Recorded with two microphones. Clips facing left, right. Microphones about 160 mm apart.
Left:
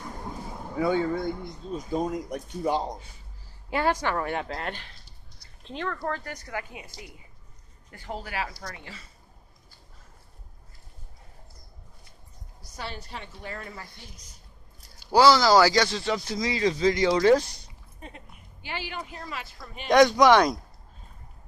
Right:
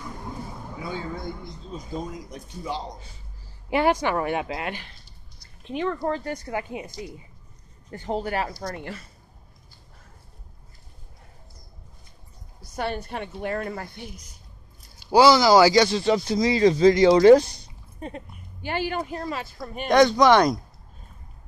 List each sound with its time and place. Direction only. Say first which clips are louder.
0.7 s speech: left 9 dB; 60° left (ahead or behind)
3.7 s speech: right 4 dB; 20° right (ahead or behind)
6.2 s speech: right 6 dB; 30° right (ahead or behind); by 9.0 s 55° right (ahead or behind)
12.7 s a woman's voice: right 9 dB; 55° right (ahead or behind)
15.0 s speech: right 3 dB; 15° right (ahead or behind)
18.0 s speech: right 9 dB; 45° right (ahead or behind)
20.0 s speech: right 1 dB; 10° left (ahead or behind)